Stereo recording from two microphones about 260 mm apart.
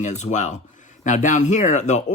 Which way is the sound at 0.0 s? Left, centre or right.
Left.